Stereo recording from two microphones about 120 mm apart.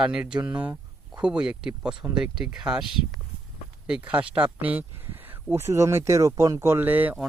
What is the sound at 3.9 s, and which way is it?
Speech, 10° right (ahead or behind).